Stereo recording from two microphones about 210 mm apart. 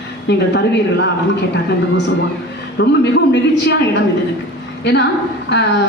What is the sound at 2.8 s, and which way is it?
Speech, 55° left (ahead or behind).